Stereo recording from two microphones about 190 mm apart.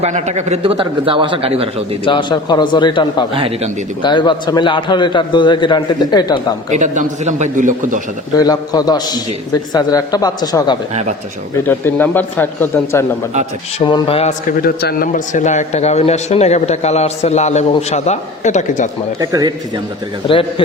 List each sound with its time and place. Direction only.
0.0 s a man's voice: 35° right (ahead or behind)
2.0 s a man's voice: 25° left (ahead or behind)
3.3 s a man's voice: 30° right (ahead or behind)
4.0 s a man's voice: 25° left (ahead or behind)
6.7 s a man's voice: 40° right (ahead or behind)
8.4 s a man's voice: 20° left (ahead or behind)
11.7 s speech: 10° left (ahead or behind)
13.7 s speech: 25° left (ahead or behind)
14.6 s speech: 55° left (ahead or behind)
19.2 s a man's voice: 20° right (ahead or behind)